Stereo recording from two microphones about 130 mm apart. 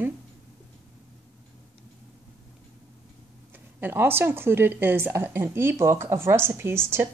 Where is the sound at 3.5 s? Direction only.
15° right (ahead or behind).